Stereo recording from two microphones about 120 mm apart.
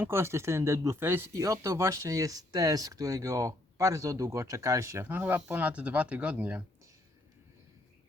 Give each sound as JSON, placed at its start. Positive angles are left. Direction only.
{"t": 0.0, "sound": "speech", "side_deg": -20}